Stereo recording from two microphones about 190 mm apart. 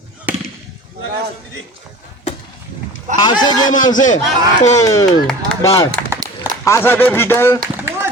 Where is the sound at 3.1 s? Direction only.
20° left (ahead or behind).